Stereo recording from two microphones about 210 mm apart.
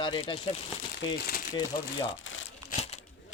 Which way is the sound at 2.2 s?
70° left (ahead or behind).